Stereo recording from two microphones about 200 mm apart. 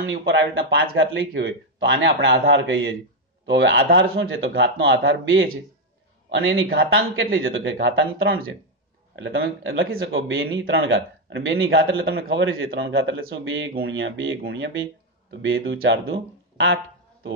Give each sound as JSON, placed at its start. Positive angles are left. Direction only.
{"t": 0.0, "sound": "a man's voice", "side_deg": -70}
{"t": 7.7, "sound": "speech", "side_deg": -60}
{"t": 9.1, "sound": "a man's voice", "side_deg": -55}
{"t": 9.9, "sound": "speech", "side_deg": -75}
{"t": 11.6, "sound": "a man's voice", "side_deg": -85}
{"t": 13.3, "sound": "speech", "side_deg": -65}